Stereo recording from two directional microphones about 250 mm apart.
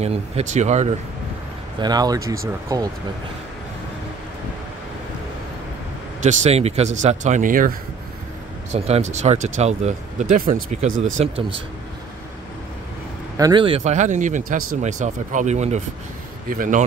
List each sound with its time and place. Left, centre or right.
0.0 s speech: right
1.8 s speech: centre
6.2 s speech: right
8.7 s speech: right
13.4 s speech: centre; by 16.8 s right